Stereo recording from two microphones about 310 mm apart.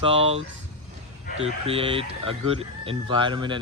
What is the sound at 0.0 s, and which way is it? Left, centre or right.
Speech, centre.